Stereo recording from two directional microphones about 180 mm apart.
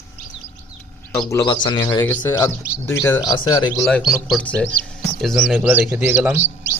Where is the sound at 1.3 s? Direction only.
25° left (ahead or behind).